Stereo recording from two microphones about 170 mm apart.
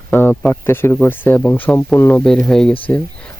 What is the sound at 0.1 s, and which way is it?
Speech, 15° left (ahead or behind).